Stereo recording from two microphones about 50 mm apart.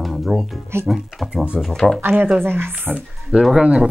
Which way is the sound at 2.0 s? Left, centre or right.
Right.